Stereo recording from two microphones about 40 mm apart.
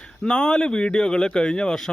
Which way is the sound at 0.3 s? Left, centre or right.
Left.